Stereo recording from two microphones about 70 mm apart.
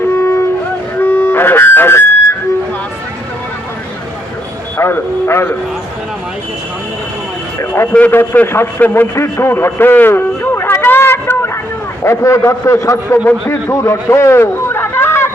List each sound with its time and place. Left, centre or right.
0.2 s music: left
0.9 s harmonica: left
4.8 s speech: left
8.1 s a man's voice: left
8.8 s a sound: left
12.0 s a man's voice: left